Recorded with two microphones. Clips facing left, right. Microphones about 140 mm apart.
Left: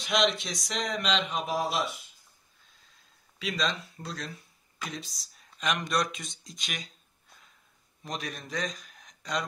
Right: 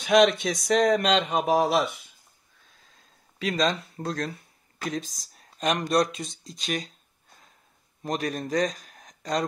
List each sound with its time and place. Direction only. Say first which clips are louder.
0.1 s speech: right 8 dB; 50° right (ahead or behind)
1.4 s speech: right 8 dB; 80° right
3.3 s speech: right 6 dB; 45° right (ahead or behind)
8.0 s speech: right 9 dB; 45° right (ahead or behind)